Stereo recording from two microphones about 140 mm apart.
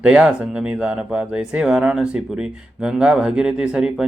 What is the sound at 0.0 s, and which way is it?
Speech, 5° right (ahead or behind).